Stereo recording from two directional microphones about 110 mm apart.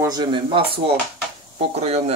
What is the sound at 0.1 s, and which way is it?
Speech, 40° right (ahead or behind).